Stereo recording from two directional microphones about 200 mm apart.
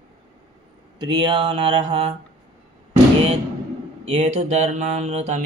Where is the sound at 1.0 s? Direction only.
25° right (ahead or behind).